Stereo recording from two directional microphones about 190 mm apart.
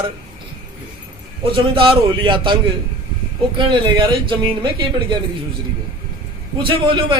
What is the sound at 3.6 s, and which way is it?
A man's voice, 25° right (ahead or behind).